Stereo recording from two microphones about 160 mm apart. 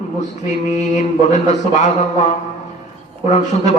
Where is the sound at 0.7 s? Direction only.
45° left (ahead or behind).